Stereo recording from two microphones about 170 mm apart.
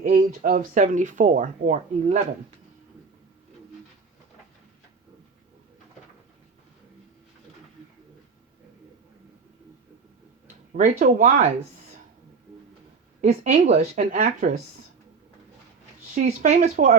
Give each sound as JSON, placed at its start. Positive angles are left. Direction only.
{"t": 0.0, "sound": "speech", "side_deg": -55}
{"t": 10.7, "sound": "speech", "side_deg": -50}
{"t": 13.2, "sound": "speech", "side_deg": -45}
{"t": 16.0, "sound": "speech", "side_deg": -45}